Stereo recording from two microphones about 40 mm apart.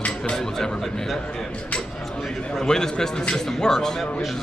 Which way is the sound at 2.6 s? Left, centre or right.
Centre.